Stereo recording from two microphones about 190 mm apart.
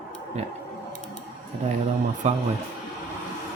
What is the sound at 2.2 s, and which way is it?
Speech, 35° right (ahead or behind).